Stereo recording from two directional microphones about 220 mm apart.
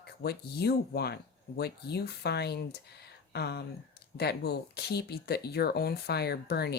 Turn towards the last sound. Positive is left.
turn(degrees=45)  # may be behind; listen again after turning